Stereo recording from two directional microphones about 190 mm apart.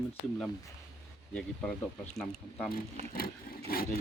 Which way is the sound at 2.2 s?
5° left (ahead or behind).